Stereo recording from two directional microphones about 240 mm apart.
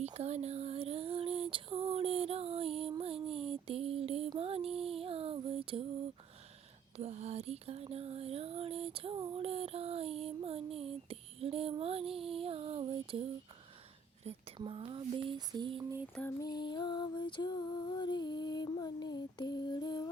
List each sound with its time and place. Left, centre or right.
0.0 s female singing: right
6.9 s music: right
14.3 s a sound: right
16.1 s female singing: centre